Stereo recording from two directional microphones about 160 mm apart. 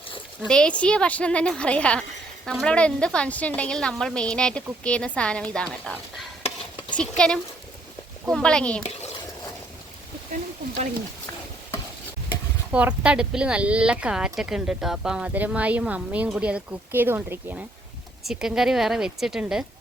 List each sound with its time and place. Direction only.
0.4 s a woman's voice: 5° left (ahead or behind)
8.3 s a woman's voice: 5° left (ahead or behind)
8.8 s a sound: 45° left (ahead or behind)
12.7 s speech: 5° right (ahead or behind)
18.3 s a woman's voice: 5° right (ahead or behind)